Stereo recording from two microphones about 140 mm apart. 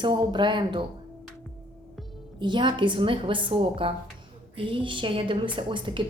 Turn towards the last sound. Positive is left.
turn(degrees=-35)  # may be behind; listen again after turning